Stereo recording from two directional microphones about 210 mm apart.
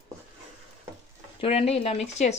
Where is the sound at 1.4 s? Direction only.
25° left (ahead or behind).